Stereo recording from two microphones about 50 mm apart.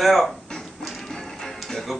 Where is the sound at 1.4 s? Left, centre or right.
Centre.